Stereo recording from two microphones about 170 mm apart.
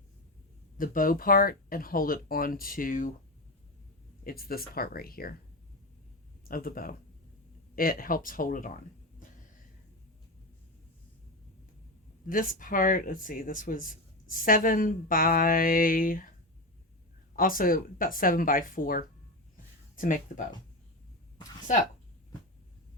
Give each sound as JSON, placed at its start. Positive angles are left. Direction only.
{"t": 0.8, "sound": "speech", "side_deg": 55}
{"t": 4.2, "sound": "speech", "side_deg": 60}
{"t": 6.5, "sound": "speech", "side_deg": 60}
{"t": 12.3, "sound": "speech", "side_deg": 55}
{"t": 17.3, "sound": "speech", "side_deg": 55}